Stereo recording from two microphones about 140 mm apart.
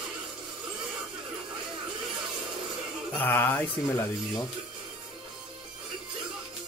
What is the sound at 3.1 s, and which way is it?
Mantra, 15° left (ahead or behind).